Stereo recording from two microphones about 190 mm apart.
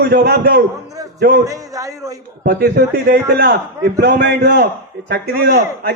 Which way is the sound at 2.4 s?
50° right (ahead or behind).